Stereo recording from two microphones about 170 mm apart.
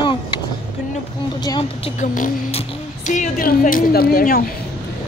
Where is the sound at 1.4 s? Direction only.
25° left (ahead or behind).